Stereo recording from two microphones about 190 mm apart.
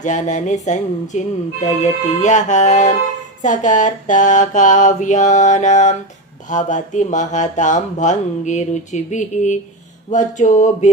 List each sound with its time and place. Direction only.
0.0 s speech: 40° left (ahead or behind)